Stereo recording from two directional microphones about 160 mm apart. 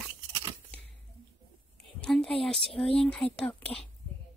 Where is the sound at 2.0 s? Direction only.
5° left (ahead or behind).